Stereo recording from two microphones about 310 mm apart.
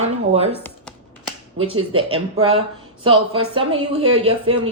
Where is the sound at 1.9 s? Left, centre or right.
Centre.